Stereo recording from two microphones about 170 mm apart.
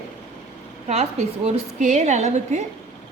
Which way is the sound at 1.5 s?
40° right (ahead or behind).